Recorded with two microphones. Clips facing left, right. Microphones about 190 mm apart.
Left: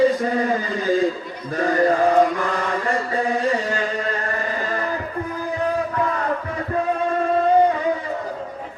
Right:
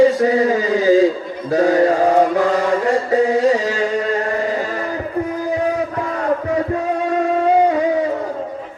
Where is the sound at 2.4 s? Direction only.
80° right.